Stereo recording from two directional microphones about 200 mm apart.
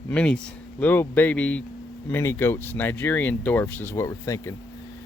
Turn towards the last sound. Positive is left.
turn(degrees=15)  # may be behind; listen again after turning